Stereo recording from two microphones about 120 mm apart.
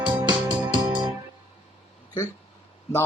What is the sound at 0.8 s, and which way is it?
Music, 30° right (ahead or behind).